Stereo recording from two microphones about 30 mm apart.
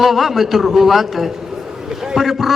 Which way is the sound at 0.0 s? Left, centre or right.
Centre.